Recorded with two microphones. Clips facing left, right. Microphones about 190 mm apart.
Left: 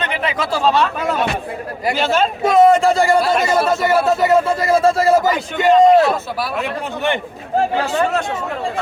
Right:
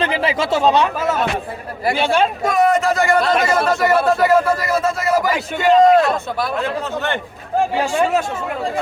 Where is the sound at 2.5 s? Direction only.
25° left (ahead or behind).